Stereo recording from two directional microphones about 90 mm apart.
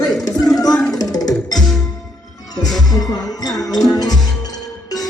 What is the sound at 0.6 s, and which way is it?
Music, 45° left (ahead or behind).